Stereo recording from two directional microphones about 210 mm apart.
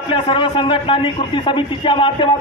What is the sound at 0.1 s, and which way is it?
A man's voice, 25° left (ahead or behind).